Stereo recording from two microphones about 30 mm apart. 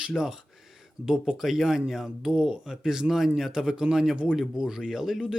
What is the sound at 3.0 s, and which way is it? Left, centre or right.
Speech, right.